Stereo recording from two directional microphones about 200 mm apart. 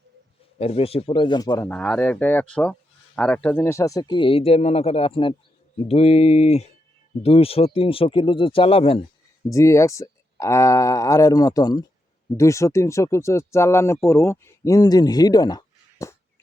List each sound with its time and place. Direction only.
0.6 s speech: 30° left (ahead or behind)
1.7 s speech: 5° left (ahead or behind); by 9.0 s 30° left (ahead or behind)
9.5 s speech: 15° left (ahead or behind)